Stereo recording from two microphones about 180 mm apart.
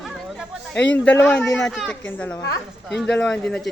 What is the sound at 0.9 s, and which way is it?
A man's voice, 5° left (ahead or behind).